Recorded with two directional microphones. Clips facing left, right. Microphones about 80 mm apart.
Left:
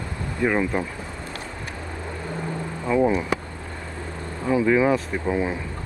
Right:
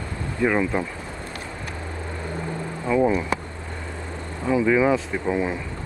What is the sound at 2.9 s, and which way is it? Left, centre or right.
Speech, centre.